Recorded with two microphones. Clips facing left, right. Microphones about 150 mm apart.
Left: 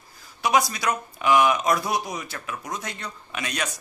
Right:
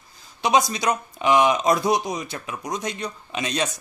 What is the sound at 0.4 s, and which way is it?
Speech, 20° right (ahead or behind).